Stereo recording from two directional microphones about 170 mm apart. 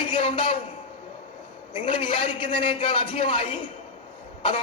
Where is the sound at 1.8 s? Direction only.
35° left (ahead or behind).